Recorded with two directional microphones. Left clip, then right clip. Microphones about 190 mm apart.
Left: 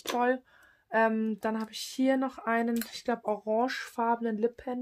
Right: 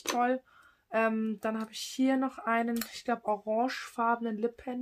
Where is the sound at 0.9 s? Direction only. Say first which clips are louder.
Left 3 dB; 45° left (ahead or behind).